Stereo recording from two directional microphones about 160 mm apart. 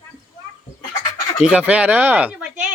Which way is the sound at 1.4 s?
5° right (ahead or behind).